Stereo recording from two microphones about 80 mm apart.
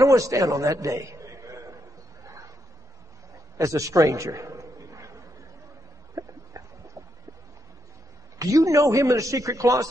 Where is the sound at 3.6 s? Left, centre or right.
Right.